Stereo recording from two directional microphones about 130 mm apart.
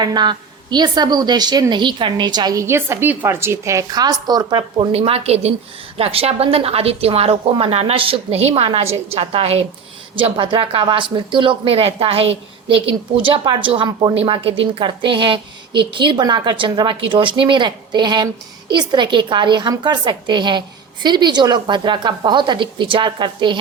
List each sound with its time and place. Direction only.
0.0 s speech: 35° right (ahead or behind)
4.9 s a woman's voice: 50° right (ahead or behind)
10.2 s speech: 40° right (ahead or behind)